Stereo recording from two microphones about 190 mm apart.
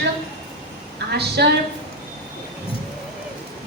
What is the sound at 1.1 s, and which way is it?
Speech, 60° right (ahead or behind).